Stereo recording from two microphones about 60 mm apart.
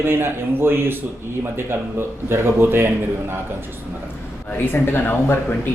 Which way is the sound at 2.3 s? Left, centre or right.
Right.